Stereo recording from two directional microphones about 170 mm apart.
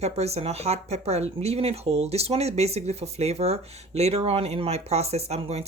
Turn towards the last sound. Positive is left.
turn(degrees=-40)  # may be behind; listen again after turning